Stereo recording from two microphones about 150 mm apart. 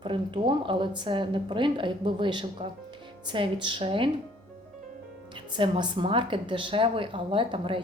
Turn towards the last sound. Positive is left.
turn(degrees=-35)  # may be behind; listen again after turning